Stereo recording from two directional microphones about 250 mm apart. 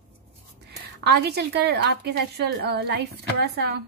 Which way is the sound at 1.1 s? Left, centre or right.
Right.